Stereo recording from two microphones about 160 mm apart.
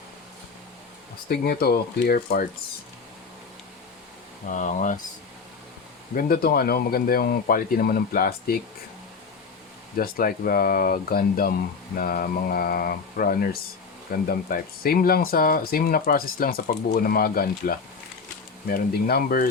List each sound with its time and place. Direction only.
1.5 s speech: 80° left
4.4 s speech: 50° left (ahead or behind)
6.1 s speech: 65° left (ahead or behind)
10.0 s speech: 65° left (ahead or behind)